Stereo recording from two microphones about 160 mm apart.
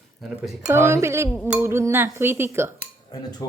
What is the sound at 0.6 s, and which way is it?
Dishes, 15° right (ahead or behind).